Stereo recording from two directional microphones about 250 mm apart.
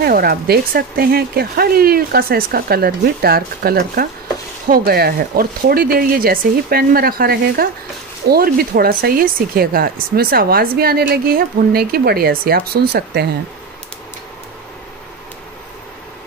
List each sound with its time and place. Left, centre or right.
0.0 s speech: right